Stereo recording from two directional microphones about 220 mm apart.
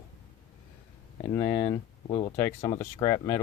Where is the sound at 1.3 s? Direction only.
5° left (ahead or behind).